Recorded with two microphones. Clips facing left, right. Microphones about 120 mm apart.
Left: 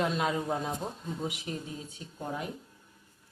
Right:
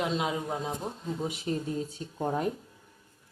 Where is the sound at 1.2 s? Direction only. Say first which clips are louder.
Right 5 dB; 35° right (ahead or behind).